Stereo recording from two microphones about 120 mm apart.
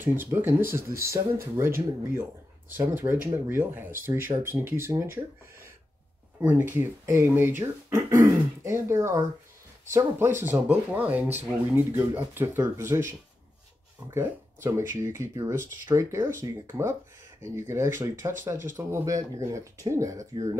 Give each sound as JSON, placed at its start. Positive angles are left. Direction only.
{"t": 0.0, "sound": "speech", "side_deg": -15}
{"t": 2.7, "sound": "speech", "side_deg": -15}
{"t": 6.4, "sound": "speech", "side_deg": -15}